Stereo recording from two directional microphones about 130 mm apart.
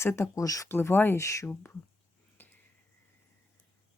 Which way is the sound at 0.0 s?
20° left (ahead or behind).